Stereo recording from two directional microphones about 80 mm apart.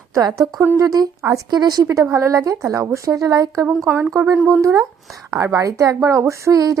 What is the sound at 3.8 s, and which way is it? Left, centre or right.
A woman's voice, right.